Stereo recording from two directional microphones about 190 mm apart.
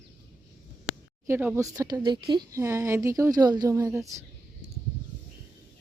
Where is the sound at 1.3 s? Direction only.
10° right (ahead or behind).